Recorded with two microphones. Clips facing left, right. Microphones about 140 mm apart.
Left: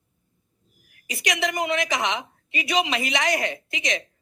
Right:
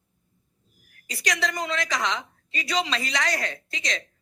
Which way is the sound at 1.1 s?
20° left (ahead or behind).